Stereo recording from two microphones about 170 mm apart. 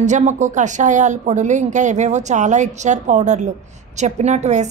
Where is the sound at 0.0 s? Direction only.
45° right (ahead or behind).